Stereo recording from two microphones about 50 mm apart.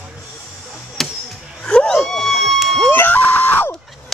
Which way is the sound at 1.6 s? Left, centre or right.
Centre.